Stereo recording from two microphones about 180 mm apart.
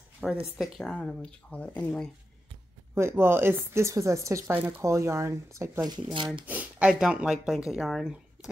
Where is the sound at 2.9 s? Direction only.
15° right (ahead or behind).